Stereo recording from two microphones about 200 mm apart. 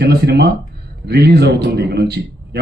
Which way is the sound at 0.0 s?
55° right (ahead or behind).